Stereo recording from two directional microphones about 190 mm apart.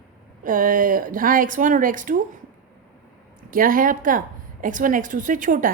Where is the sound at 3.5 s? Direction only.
45° right (ahead or behind).